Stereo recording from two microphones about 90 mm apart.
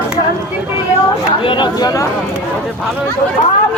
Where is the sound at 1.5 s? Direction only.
55° left (ahead or behind).